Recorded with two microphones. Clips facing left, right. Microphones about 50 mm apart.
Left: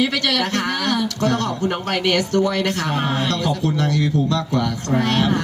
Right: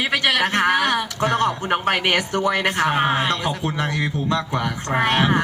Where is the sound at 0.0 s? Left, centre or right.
Right.